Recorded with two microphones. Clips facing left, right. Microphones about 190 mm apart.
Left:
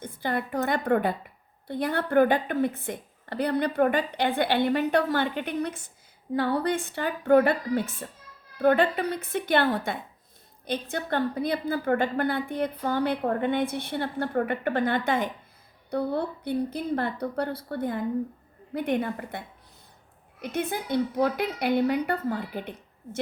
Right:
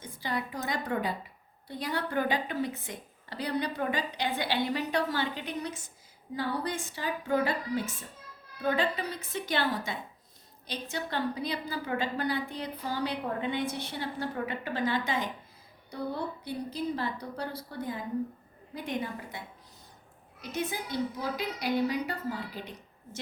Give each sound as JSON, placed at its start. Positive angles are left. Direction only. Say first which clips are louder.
{"t": 0.0, "sound": "a woman's voice", "louder": "left 5 dB", "side_deg": 55}
{"t": 20.4, "sound": "a woman's voice", "louder": "left 5 dB", "side_deg": 55}